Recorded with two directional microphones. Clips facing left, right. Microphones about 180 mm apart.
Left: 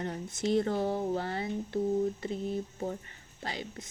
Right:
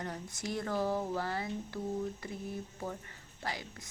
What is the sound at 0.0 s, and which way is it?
Speech, 25° left (ahead or behind).